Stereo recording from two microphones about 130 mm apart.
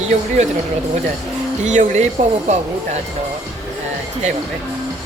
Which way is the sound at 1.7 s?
70° right (ahead or behind).